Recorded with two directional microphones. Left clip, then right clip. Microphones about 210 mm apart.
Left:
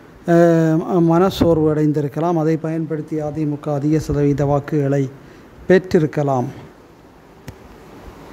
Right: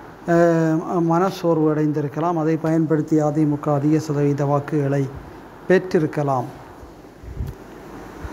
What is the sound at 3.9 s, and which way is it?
Speech, 30° left (ahead or behind).